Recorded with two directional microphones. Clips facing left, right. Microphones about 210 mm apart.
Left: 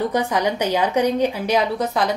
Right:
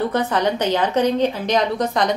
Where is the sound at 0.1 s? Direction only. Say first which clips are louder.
Right 1 dB; 10° left (ahead or behind).